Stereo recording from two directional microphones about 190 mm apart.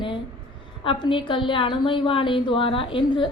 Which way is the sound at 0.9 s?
25° left (ahead or behind).